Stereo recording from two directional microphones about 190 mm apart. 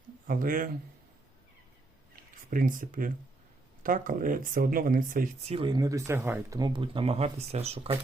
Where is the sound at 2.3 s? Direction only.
45° right (ahead or behind).